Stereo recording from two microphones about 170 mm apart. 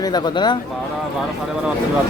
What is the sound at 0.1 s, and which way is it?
Speech, 25° left (ahead or behind).